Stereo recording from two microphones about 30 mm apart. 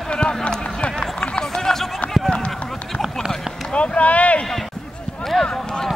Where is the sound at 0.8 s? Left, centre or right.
Left.